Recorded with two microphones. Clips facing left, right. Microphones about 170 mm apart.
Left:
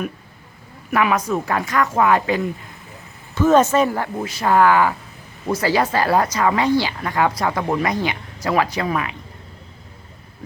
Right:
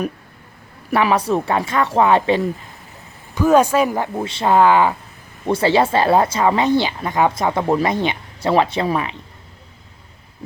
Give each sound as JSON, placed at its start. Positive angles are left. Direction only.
{"t": 0.9, "sound": "speech", "side_deg": -30}
{"t": 3.3, "sound": "speech", "side_deg": -10}